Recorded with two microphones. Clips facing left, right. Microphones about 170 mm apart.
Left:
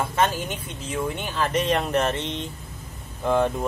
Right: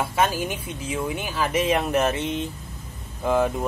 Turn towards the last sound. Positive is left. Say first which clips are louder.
# even
turn(degrees=-5)  # may be behind; listen again after turning